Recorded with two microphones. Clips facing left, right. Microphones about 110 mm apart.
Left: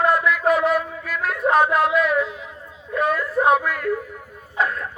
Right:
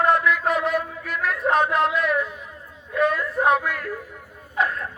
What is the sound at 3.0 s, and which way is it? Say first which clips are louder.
Whimper: left 1 dB; 40° left (ahead or behind).